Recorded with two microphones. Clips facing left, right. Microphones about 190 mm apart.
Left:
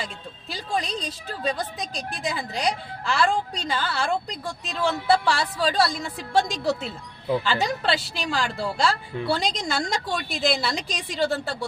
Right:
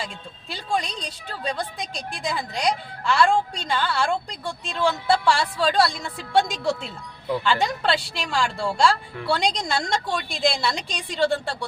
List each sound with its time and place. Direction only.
0.5 s a woman's voice: centre (ahead or behind)